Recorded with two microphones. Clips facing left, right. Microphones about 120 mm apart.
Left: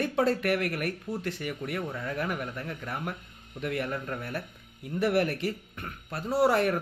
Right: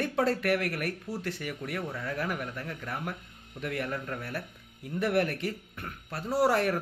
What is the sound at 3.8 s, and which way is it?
Speech, 25° left (ahead or behind).